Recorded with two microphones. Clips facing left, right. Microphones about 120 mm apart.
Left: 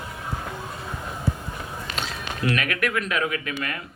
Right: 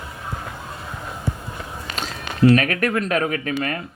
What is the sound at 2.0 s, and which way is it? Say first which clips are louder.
Speech: right 11 dB; 35° right (ahead or behind).